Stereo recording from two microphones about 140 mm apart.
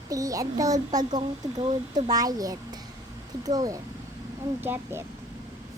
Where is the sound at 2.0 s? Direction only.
25° right (ahead or behind).